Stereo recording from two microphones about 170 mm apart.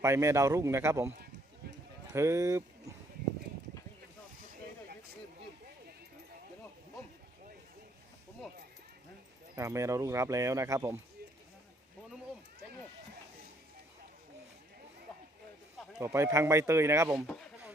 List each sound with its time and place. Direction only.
0.0 s speech: 15° right (ahead or behind)
2.1 s speech: 15° right (ahead or behind)
9.6 s speech: 15° right (ahead or behind)
16.0 s speech: 15° right (ahead or behind)